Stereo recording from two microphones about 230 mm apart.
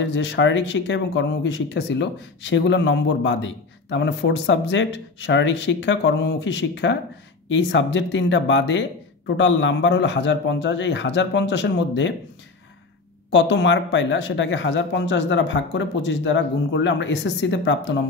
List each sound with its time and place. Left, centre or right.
0.0 s speech: left
13.3 s speech: left